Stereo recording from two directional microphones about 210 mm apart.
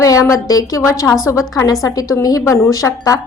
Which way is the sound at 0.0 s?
15° left (ahead or behind).